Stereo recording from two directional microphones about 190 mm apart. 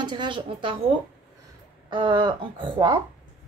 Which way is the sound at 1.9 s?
25° right (ahead or behind).